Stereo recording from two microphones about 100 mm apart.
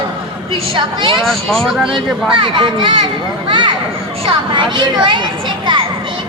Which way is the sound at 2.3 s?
55° right (ahead or behind).